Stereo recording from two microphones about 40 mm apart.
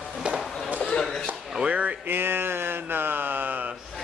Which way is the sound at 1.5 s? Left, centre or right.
Right.